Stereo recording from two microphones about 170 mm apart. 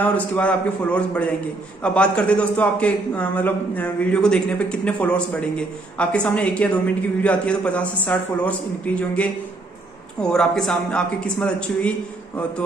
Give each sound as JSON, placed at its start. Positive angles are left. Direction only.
{"t": 0.0, "sound": "a man's voice", "side_deg": 10}
{"t": 10.3, "sound": "a man's voice", "side_deg": 5}